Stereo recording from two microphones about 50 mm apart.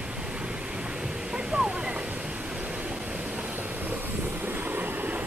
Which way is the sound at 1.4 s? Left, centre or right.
Right.